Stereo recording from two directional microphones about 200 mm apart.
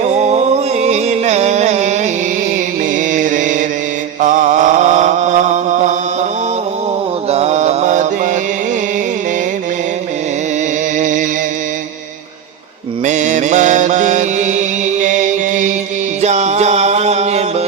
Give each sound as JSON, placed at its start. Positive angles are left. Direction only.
{"t": 0.2, "sound": "music", "side_deg": -35}
{"t": 3.1, "sound": "music", "side_deg": -40}
{"t": 4.2, "sound": "mantra", "side_deg": -40}
{"t": 7.3, "sound": "mantra", "side_deg": -30}
{"t": 10.9, "sound": "mantra", "side_deg": -40}
{"t": 13.1, "sound": "mantra", "side_deg": -40}
{"t": 15.0, "sound": "music", "side_deg": -40}